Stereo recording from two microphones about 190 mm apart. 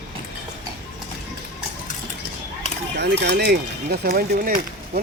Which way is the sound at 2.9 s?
60° right (ahead or behind).